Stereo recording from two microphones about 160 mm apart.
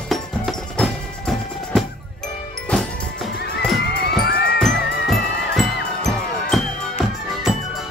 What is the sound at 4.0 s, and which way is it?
Music, 85° left.